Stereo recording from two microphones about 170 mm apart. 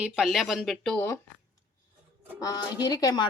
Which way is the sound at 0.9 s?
15° left (ahead or behind).